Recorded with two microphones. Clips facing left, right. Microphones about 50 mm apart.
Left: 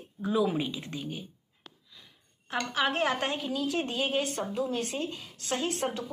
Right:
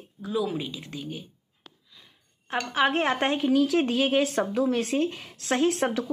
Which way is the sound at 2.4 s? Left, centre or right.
Right.